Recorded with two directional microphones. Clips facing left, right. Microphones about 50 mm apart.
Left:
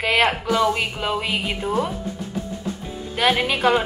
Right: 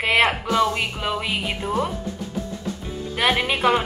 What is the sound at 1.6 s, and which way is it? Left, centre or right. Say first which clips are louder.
Speech: left 1 dB; left.